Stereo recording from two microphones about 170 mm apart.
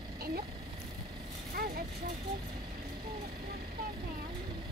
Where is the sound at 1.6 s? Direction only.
60° right (ahead or behind).